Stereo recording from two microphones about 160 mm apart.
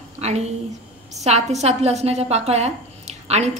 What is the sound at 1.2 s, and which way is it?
A woman's voice, 45° right (ahead or behind).